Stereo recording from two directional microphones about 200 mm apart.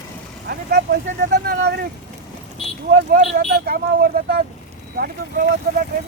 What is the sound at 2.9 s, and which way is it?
Speech, 45° right (ahead or behind).